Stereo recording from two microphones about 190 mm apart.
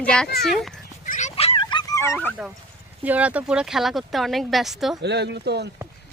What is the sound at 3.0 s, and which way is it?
Speech, 5° right (ahead or behind).